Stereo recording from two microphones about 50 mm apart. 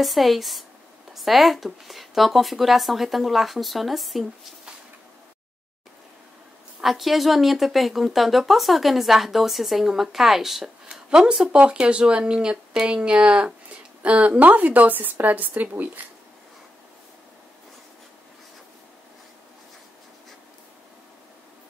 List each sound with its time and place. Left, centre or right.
0.0 s speech: centre
6.8 s speech: centre; by 16.1 s right